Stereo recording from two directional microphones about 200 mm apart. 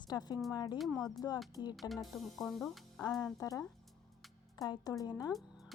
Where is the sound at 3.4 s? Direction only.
15° left (ahead or behind).